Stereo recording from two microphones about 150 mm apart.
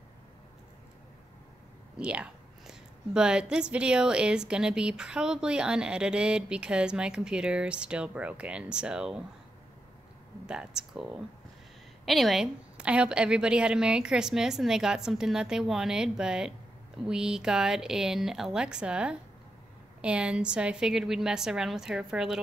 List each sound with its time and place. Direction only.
2.0 s a woman's voice: 5° right (ahead or behind)
10.4 s a woman's voice: 5° right (ahead or behind)